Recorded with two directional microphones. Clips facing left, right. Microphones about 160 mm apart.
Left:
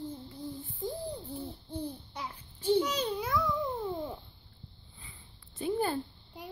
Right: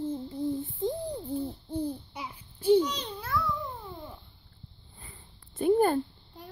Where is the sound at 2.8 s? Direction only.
5° left (ahead or behind).